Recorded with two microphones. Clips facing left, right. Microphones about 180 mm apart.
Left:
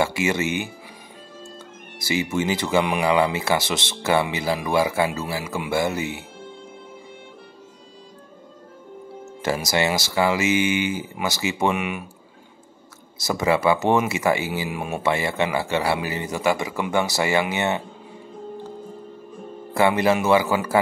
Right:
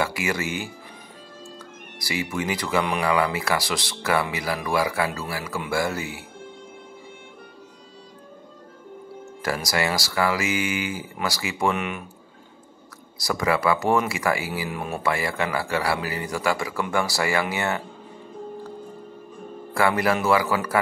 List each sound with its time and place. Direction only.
0.0 s speech: 25° left (ahead or behind)
2.0 s a man's voice: 25° left (ahead or behind)
9.4 s speech: 25° left (ahead or behind)
13.2 s speech: 25° left (ahead or behind)
19.7 s speech: 20° left (ahead or behind)